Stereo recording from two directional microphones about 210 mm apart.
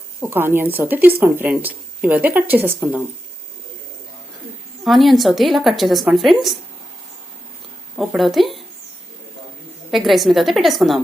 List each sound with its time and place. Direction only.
0.2 s speech: 10° right (ahead or behind)
4.8 s a woman's voice: centre (ahead or behind)
7.9 s speech: centre (ahead or behind)
9.9 s a woman's voice: centre (ahead or behind)